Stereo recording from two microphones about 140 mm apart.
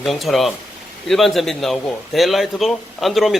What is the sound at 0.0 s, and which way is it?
A man's voice, centre (ahead or behind).